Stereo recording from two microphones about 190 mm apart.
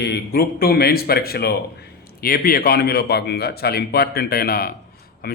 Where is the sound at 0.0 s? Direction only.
55° left (ahead or behind).